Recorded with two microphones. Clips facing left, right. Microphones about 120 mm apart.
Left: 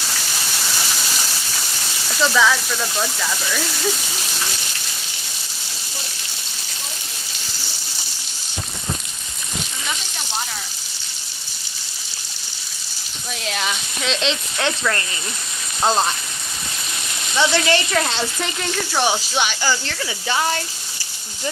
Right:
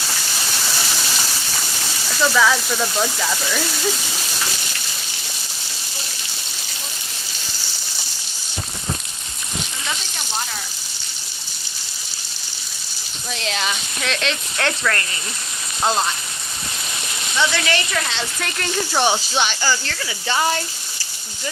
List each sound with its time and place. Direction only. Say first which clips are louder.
2.2 s speech: even; 5° right (ahead or behind)
13.3 s speech: right 1 dB; 5° left (ahead or behind)
14.0 s speech: left 2 dB; 20° left (ahead or behind)
17.3 s speech: left 3 dB; 30° left (ahead or behind)
18.3 s speech: left 1 dB; 5° left (ahead or behind)
18.7 s speech: right 2 dB; 5° right (ahead or behind); by 20.0 s 15° left (ahead or behind)
20.2 s speech: right 1 dB; centre (ahead or behind)